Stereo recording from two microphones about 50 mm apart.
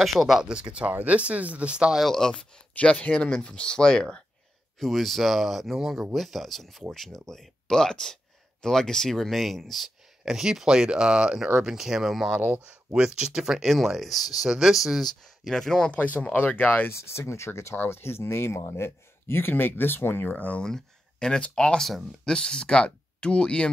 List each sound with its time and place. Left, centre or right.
0.0 s speech: centre
0.5 s speech: centre
2.0 s speech: centre
2.7 s speech: left
4.7 s speech: centre
10.2 s speech: centre
12.4 s speech: right
12.9 s speech: centre
13.6 s speech: centre
15.0 s speech: centre
15.9 s speech: left
16.9 s speech: left
17.7 s speech: left
20.6 s speech: centre